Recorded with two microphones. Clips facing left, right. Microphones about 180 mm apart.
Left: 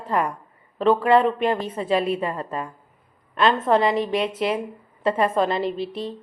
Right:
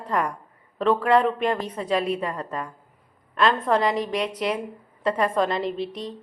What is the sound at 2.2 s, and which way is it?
Speech, 25° left (ahead or behind).